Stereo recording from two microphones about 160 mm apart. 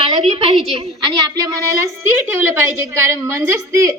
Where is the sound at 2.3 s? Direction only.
10° right (ahead or behind).